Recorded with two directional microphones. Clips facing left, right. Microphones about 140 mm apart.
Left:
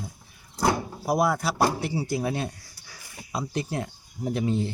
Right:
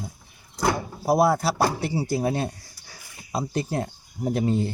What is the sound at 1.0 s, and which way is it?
Speech, 30° right (ahead or behind).